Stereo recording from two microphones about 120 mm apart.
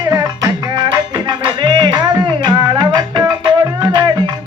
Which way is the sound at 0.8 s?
40° right (ahead or behind).